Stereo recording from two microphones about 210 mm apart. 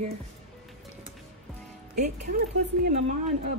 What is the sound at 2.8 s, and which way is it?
Speech, 35° right (ahead or behind).